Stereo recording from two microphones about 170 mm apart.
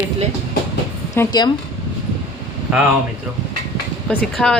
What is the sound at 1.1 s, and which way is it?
Speech, 20° left (ahead or behind).